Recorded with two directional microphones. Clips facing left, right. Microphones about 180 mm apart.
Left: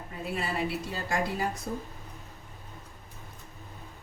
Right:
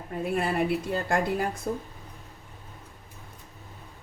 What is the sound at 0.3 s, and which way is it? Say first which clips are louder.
A woman's voice: right 5 dB; 55° right (ahead or behind).